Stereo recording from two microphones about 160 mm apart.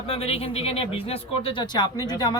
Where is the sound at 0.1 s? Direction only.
40° left (ahead or behind).